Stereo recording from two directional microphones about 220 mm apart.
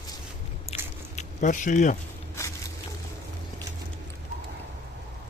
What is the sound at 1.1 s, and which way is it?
Speech, 35° left (ahead or behind).